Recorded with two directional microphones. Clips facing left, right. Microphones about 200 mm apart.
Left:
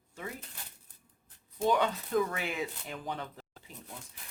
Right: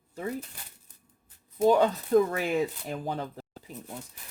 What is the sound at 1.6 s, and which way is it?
Speech, 40° right (ahead or behind).